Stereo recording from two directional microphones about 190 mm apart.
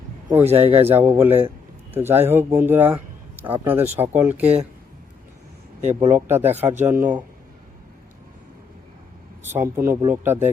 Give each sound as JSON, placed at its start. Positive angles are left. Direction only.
{"t": 0.4, "sound": "speech", "side_deg": -35}
{"t": 0.9, "sound": "speech", "side_deg": -10}
{"t": 6.0, "sound": "speech", "side_deg": -15}
{"t": 9.4, "sound": "speech", "side_deg": -10}